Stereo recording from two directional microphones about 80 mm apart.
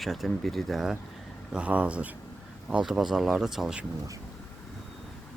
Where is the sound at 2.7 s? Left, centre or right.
Centre.